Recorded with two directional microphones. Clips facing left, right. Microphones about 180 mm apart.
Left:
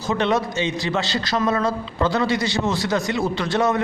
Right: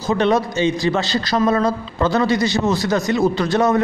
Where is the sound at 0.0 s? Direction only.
35° right (ahead or behind).